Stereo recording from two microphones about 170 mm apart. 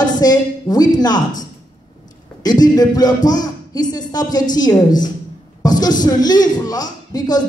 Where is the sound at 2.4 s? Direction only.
25° left (ahead or behind).